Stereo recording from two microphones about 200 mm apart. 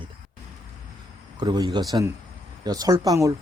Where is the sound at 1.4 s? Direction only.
20° right (ahead or behind).